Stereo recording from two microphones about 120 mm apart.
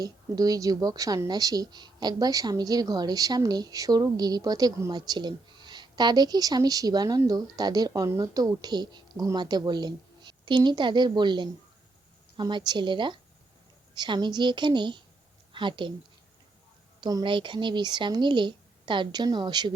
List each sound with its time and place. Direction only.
0.0 s a woman's voice: 30° right (ahead or behind)
17.0 s a woman's voice: 35° right (ahead or behind)